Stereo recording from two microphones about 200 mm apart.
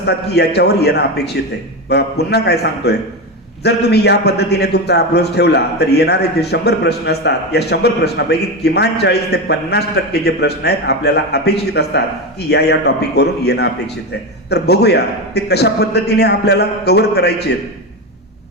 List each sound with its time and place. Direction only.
0.0 s a man's voice: 55° left (ahead or behind)